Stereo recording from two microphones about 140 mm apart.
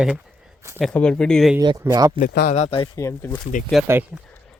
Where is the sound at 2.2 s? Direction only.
75° left (ahead or behind).